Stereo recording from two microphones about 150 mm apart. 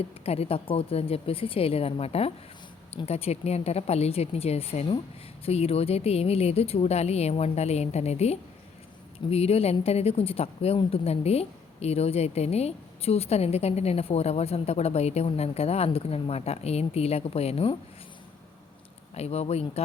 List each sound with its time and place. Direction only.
0.0 s a woman's voice: 40° left (ahead or behind)
19.1 s a woman's voice: 45° left (ahead or behind)